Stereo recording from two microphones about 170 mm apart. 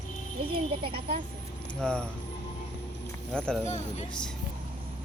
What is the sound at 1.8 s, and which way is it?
Speech, 5° left (ahead or behind).